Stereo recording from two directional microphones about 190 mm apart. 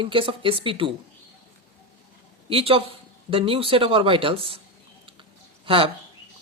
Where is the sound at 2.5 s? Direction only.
30° right (ahead or behind).